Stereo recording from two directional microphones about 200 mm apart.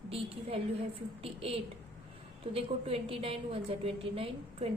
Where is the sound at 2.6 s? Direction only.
30° right (ahead or behind).